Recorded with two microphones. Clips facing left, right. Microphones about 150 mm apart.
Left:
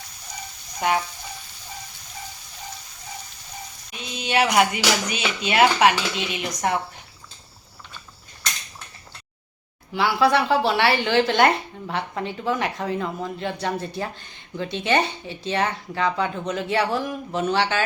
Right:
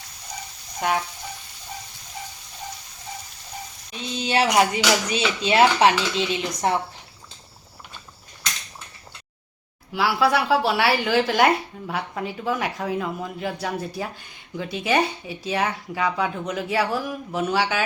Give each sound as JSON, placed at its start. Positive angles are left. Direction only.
{"t": 0.8, "sound": "a woman's voice", "side_deg": 0}
{"t": 4.1, "sound": "speech", "side_deg": -35}
{"t": 9.9, "sound": "a woman's voice", "side_deg": -5}